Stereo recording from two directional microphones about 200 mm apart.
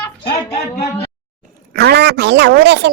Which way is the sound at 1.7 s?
55° right (ahead or behind).